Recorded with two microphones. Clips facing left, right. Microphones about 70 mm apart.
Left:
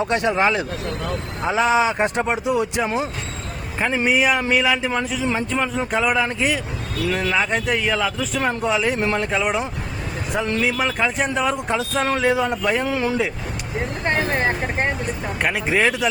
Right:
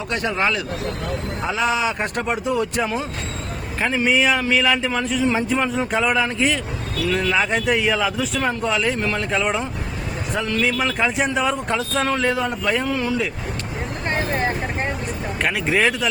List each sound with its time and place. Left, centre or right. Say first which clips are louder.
0.1 s speech: even; left
4.0 s speech: even; centre
8.4 s speech: left 2 dB; centre
12.0 s speech: left 4 dB; centre
12.6 s speech: left 1 dB; centre
13.0 s speech: left 1 dB; centre
15.4 s speech: even; centre